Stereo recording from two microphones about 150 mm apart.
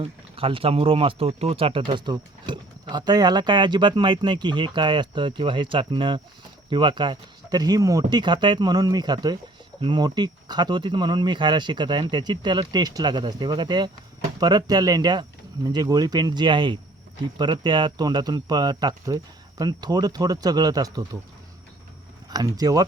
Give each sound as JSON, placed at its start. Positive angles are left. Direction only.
{"t": 0.0, "sound": "speech", "side_deg": -40}
{"t": 22.3, "sound": "speech", "side_deg": -25}